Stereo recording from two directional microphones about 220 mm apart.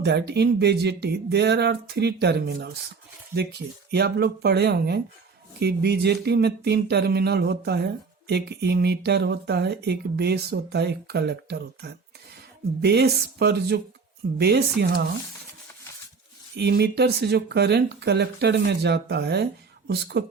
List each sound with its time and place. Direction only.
0.0 s speech: 50° right (ahead or behind)
3.9 s speech: 45° right (ahead or behind)
16.6 s speech: 50° right (ahead or behind)